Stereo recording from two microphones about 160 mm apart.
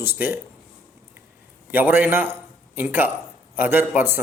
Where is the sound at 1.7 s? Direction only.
10° right (ahead or behind).